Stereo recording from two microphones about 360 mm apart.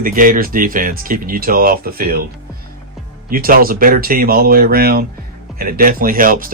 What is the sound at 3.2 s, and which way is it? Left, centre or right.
Speech, right.